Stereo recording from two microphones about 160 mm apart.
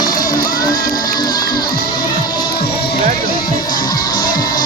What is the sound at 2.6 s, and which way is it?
Music, 80° left.